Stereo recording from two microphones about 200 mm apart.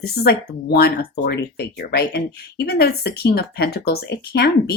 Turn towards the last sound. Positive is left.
turn(degrees=50)  # may be behind; listen again after turning